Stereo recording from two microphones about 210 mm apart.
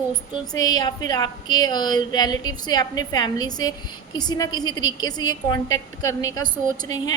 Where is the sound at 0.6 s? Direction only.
20° left (ahead or behind).